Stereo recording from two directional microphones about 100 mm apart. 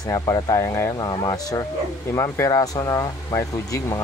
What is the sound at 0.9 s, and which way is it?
Speech, 40° left (ahead or behind).